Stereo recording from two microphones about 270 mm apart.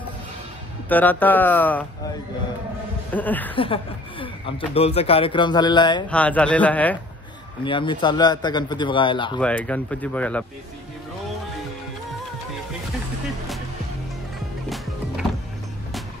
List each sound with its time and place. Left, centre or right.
0.8 s a man's voice: centre
3.1 s speech: centre
3.5 s speech: centre
6.0 s speech: centre
7.6 s a man's voice: centre
9.4 s speech: centre